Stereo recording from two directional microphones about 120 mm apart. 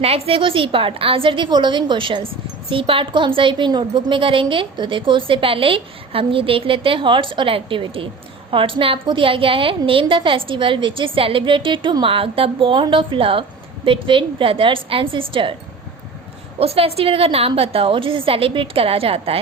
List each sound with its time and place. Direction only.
0.0 s a woman's voice: 55° right (ahead or behind)
16.6 s a woman's voice: 55° right (ahead or behind)